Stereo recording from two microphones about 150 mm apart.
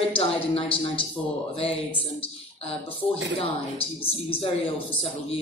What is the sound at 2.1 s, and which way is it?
Speech, 35° left (ahead or behind).